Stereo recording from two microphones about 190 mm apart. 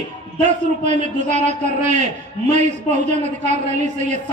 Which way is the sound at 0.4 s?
40° right (ahead or behind).